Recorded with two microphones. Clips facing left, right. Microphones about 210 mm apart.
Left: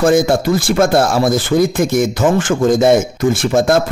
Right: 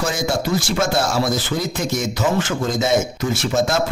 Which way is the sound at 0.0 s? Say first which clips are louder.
Left 10 dB; 55° left (ahead or behind).